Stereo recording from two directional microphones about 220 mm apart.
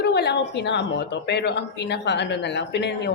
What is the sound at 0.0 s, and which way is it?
A woman's voice, 50° left (ahead or behind).